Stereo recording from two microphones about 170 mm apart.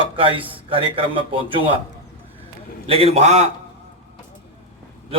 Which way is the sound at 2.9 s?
35° right (ahead or behind).